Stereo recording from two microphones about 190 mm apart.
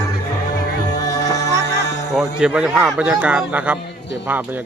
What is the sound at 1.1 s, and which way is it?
Music, 20° left (ahead or behind).